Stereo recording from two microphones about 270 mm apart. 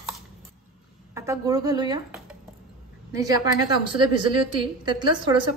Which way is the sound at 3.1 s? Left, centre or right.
Centre.